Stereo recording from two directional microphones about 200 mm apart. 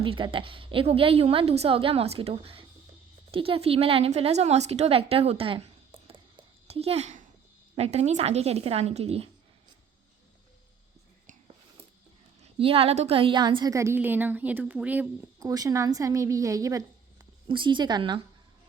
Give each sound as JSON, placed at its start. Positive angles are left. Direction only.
{"t": 0.0, "sound": "a woman's voice", "side_deg": -25}
{"t": 12.4, "sound": "a woman's voice", "side_deg": -30}